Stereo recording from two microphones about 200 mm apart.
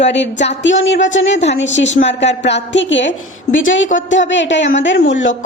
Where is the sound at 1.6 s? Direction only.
65° left (ahead or behind).